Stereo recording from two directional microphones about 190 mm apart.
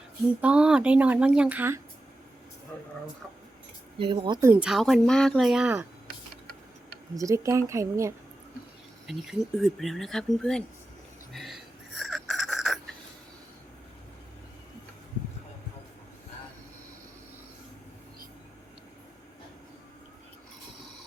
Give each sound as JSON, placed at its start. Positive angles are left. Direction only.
{"t": 0.4, "sound": "speech", "side_deg": -5}
{"t": 3.9, "sound": "speech", "side_deg": -25}
{"t": 4.6, "sound": "speech", "side_deg": 0}
{"t": 7.2, "sound": "speech", "side_deg": -15}
{"t": 9.0, "sound": "speech", "side_deg": 0}
{"t": 11.3, "sound": "wheeze", "side_deg": 0}